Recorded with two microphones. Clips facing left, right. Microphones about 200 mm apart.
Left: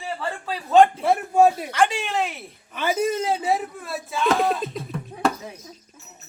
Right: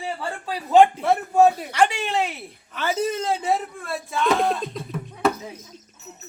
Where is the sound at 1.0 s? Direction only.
10° left (ahead or behind).